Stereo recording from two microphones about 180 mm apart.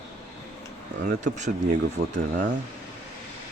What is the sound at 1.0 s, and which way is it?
Speech, 45° right (ahead or behind).